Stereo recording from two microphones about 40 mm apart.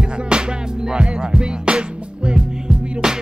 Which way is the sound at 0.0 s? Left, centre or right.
Right.